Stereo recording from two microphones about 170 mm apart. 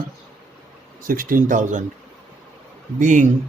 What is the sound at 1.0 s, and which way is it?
Speech, 55° right (ahead or behind).